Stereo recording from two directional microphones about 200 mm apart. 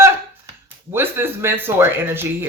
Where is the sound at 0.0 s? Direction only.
15° right (ahead or behind).